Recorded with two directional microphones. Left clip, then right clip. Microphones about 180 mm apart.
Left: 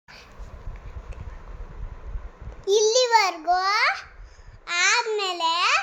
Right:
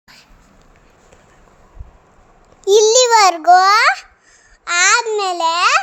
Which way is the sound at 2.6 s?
50° right (ahead or behind).